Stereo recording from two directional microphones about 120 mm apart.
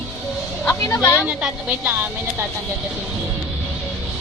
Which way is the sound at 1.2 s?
10° right (ahead or behind).